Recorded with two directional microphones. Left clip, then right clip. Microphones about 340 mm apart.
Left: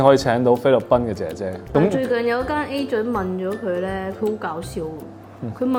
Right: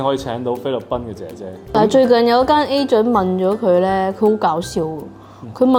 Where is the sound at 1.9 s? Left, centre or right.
Right.